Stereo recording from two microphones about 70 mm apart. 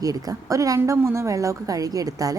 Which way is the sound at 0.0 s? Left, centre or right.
Right.